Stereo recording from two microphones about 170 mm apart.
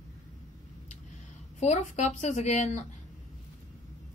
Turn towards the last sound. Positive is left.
turn(degrees=40)  # may be behind; listen again after turning